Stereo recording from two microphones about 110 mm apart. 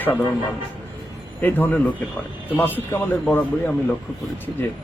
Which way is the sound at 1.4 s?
15° left (ahead or behind).